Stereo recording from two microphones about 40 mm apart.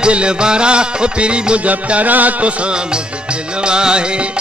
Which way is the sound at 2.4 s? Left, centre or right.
Right.